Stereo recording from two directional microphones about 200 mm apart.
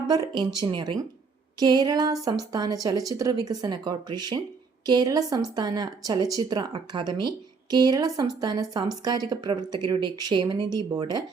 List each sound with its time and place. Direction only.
0.1 s speech: 20° right (ahead or behind)